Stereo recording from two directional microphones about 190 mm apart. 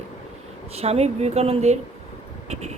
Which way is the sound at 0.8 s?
35° right (ahead or behind).